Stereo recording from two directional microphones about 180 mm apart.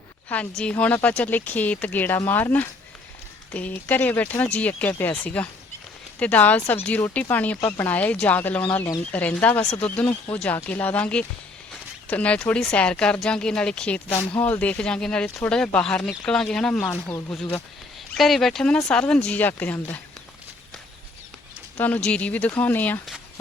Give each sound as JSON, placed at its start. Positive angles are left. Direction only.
{"t": 0.3, "sound": "speech", "side_deg": 5}
{"t": 17.1, "sound": "speech", "side_deg": 15}
{"t": 18.1, "sound": "speech", "side_deg": 0}
{"t": 21.8, "sound": "speech", "side_deg": 10}